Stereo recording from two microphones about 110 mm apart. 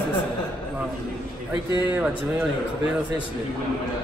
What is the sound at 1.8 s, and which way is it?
Speech, 10° right (ahead or behind).